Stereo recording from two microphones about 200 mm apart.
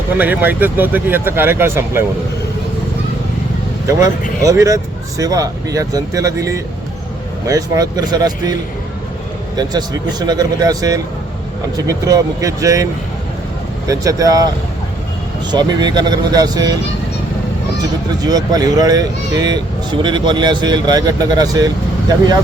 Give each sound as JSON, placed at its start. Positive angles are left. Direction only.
{"t": 0.2, "sound": "speech", "side_deg": -10}
{"t": 3.8, "sound": "speech", "side_deg": -15}
{"t": 9.6, "sound": "speech", "side_deg": -20}
{"t": 15.5, "sound": "speech", "side_deg": -20}
{"t": 18.2, "sound": "speech", "side_deg": -20}